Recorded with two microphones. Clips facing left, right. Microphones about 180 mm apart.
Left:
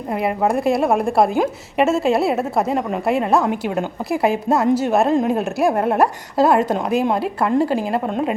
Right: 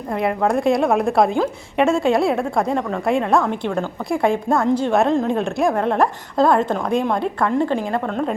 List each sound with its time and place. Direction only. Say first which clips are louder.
0.1 s a woman's voice: even; 5° left (ahead or behind)
8.0 s a woman's voice: left 1 dB; 15° left (ahead or behind)